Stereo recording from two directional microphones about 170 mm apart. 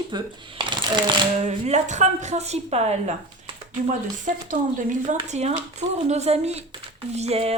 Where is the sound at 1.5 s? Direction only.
40° right (ahead or behind).